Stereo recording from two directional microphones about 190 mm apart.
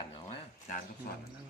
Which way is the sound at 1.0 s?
55° left (ahead or behind).